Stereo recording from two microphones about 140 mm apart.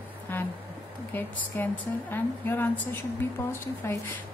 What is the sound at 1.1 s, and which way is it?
A woman's voice, 15° left (ahead or behind).